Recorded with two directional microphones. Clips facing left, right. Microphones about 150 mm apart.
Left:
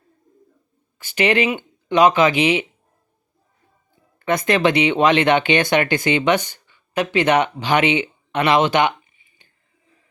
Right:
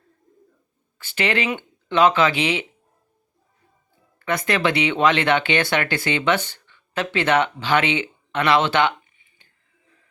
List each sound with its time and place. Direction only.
0.9 s speech: 15° left (ahead or behind)
4.2 s speech: 20° left (ahead or behind)